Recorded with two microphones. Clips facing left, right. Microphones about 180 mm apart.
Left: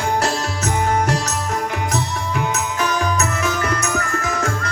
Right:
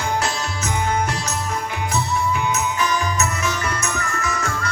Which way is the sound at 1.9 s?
75° left (ahead or behind).